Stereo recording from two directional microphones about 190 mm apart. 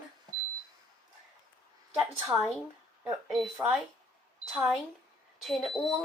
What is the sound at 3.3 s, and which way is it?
A child's voice, 5° right (ahead or behind).